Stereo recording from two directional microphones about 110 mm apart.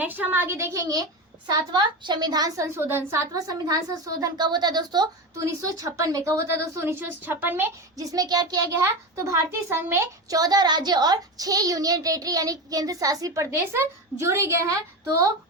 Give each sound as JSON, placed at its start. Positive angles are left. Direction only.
{"t": 0.0, "sound": "a woman's voice", "side_deg": -15}
{"t": 2.6, "sound": "a child's voice", "side_deg": -25}
{"t": 7.9, "sound": "a child's voice", "side_deg": -35}